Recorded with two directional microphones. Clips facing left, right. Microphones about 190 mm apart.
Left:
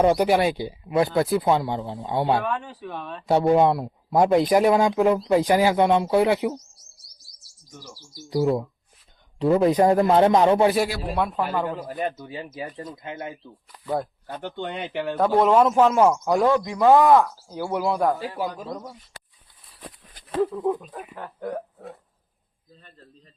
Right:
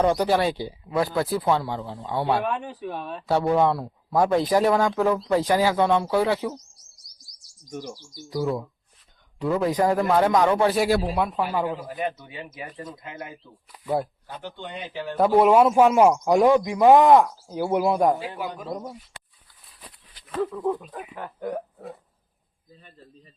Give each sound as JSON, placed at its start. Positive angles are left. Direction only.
{"t": 0.0, "sound": "speech", "side_deg": 15}
{"t": 2.4, "sound": "a man's voice", "side_deg": -15}
{"t": 3.2, "sound": "speech", "side_deg": 20}
{"t": 8.3, "sound": "speech", "side_deg": 25}
{"t": 11.1, "sound": "a man's voice", "side_deg": -5}
{"t": 12.2, "sound": "speech", "side_deg": 35}
{"t": 13.7, "sound": "a man's voice", "side_deg": -10}
{"t": 14.3, "sound": "speech", "side_deg": 60}
{"t": 15.2, "sound": "a man's voice", "side_deg": -10}
{"t": 20.2, "sound": "a sound", "side_deg": 50}
{"t": 20.6, "sound": "speech", "side_deg": 15}
{"t": 21.0, "sound": "a man's voice", "side_deg": -5}
{"t": 22.7, "sound": "a man's voice", "side_deg": -5}